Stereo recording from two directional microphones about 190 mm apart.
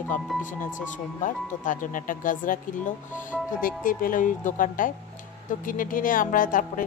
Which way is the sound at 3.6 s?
45° left (ahead or behind).